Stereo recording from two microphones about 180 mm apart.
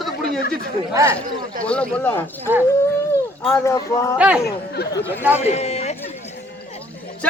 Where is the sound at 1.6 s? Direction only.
5° left (ahead or behind).